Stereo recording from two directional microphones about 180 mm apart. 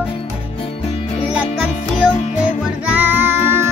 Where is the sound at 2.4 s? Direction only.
10° right (ahead or behind).